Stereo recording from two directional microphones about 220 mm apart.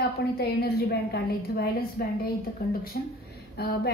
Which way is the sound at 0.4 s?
45° left (ahead or behind).